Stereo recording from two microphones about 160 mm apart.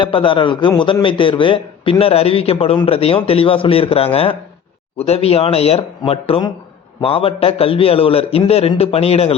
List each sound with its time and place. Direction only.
0.0 s a man's voice: 30° left (ahead or behind)